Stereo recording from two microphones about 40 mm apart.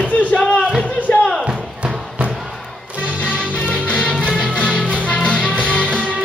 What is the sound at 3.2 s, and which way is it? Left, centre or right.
Music, left.